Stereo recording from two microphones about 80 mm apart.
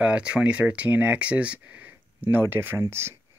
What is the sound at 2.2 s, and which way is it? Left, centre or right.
Speech, right.